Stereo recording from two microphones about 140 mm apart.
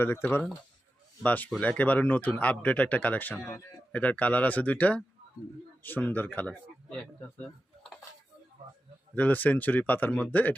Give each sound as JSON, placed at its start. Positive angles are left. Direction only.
{"t": 0.0, "sound": "speech", "side_deg": 15}
{"t": 9.1, "sound": "speech", "side_deg": 10}